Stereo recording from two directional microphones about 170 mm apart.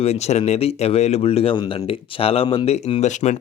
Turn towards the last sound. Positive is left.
turn(degrees=45)  # may be behind; listen again after turning